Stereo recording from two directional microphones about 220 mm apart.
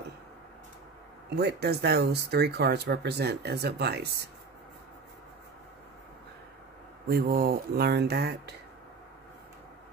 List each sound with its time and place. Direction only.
1.3 s speech: 50° right (ahead or behind)
7.1 s speech: 45° right (ahead or behind)